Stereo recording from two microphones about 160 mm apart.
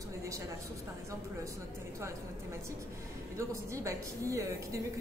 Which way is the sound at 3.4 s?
20° right (ahead or behind).